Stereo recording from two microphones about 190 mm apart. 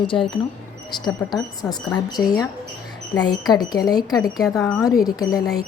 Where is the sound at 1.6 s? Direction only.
5° left (ahead or behind).